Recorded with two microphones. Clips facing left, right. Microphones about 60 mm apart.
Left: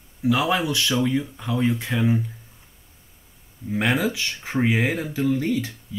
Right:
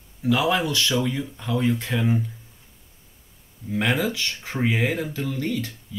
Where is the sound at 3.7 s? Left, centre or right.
Centre.